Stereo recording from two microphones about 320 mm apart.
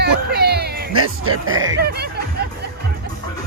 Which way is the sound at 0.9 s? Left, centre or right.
Right.